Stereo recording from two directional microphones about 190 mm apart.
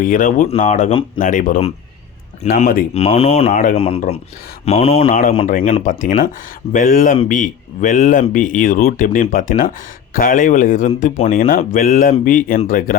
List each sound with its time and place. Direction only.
0.0 s speech: 45° left (ahead or behind)
0.4 s speech: 35° left (ahead or behind)
1.2 s speech: 45° left (ahead or behind)
3.5 s speech: 45° left (ahead or behind)
3.8 s speech: 30° left (ahead or behind)
5.0 s speech: 50° left (ahead or behind)